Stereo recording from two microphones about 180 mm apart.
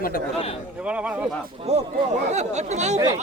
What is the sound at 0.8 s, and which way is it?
Speech, 5° right (ahead or behind).